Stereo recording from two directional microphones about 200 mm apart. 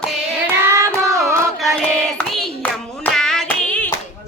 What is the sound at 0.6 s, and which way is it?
Child singing, 15° right (ahead or behind).